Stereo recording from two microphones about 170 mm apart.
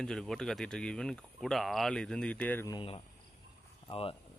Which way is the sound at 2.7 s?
30° left (ahead or behind).